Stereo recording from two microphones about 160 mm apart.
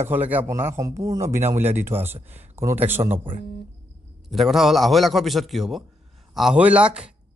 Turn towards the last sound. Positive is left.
turn(degrees=-5)  # may be behind; listen again after turning